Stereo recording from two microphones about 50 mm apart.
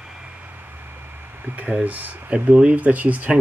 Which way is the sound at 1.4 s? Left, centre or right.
Right.